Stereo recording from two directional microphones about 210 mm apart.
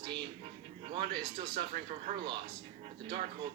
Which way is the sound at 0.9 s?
50° right (ahead or behind).